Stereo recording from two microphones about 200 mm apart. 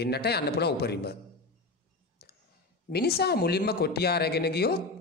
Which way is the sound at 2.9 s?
50° left (ahead or behind).